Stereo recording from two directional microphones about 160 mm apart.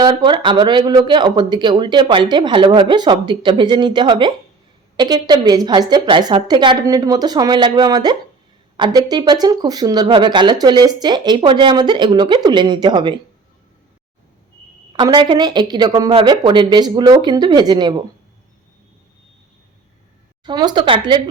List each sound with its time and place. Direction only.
0.0 s speech: 25° right (ahead or behind)
14.9 s speech: 30° right (ahead or behind)
20.4 s speech: 25° right (ahead or behind)